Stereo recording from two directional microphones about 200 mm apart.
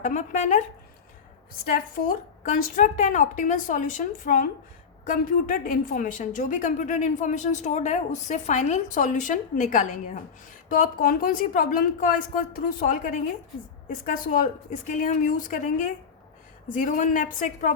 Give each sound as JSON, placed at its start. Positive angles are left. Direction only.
{"t": 0.0, "sound": "a woman's voice", "side_deg": 35}
{"t": 1.6, "sound": "a woman's voice", "side_deg": 45}